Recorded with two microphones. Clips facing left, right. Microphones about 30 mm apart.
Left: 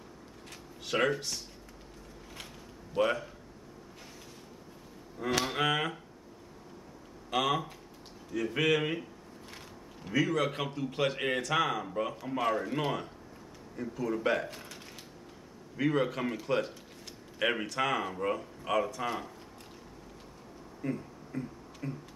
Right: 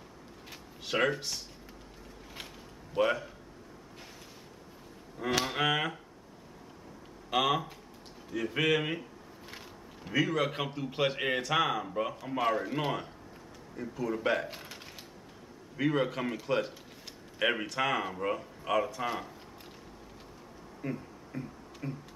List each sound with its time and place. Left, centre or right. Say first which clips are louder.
0.9 s speech: even; centre
2.4 s a sound: even; centre
5.2 s speech: even; centre
7.2 s a man's voice: right 1 dB; centre
14.5 s speech: right 1 dB; centre
15.7 s speech: even; centre
20.8 s music: left 2 dB; centre